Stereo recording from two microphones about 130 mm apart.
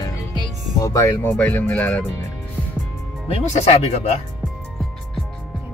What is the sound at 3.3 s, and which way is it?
Speech, 60° left (ahead or behind).